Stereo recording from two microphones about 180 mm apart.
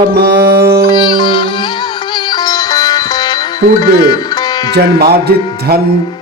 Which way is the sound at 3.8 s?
20° left (ahead or behind).